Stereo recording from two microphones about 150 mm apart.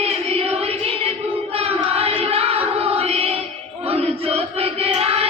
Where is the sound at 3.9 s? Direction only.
40° right (ahead or behind).